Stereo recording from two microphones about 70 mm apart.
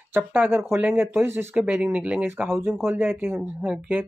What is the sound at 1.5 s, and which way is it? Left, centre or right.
Speech, centre.